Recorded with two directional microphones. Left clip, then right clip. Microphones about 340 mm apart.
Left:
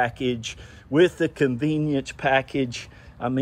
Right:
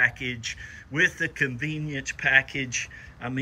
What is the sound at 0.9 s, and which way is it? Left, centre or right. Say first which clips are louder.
Speech: left 4 dB; left.